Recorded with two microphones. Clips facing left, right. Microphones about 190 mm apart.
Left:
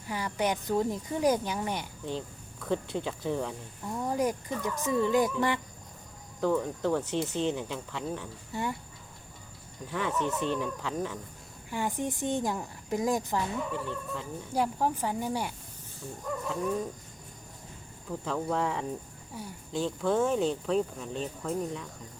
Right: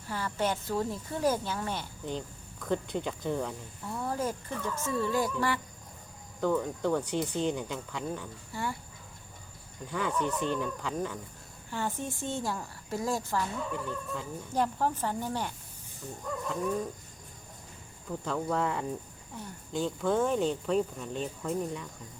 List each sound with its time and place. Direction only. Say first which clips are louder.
0.1 s speech: left 1 dB; 15° left (ahead or behind)
2.0 s speech: even; centre (ahead or behind)
3.8 s speech: left 3 dB; 15° left (ahead or behind)
6.4 s speech: left 1 dB; centre (ahead or behind)
9.9 s speech: even; centre (ahead or behind)
11.7 s speech: left 3 dB; 15° left (ahead or behind)
13.7 s speech: left 1 dB; centre (ahead or behind)
14.5 s speech: left 1 dB; 10° left (ahead or behind)
18.1 s speech: even; 5° left (ahead or behind)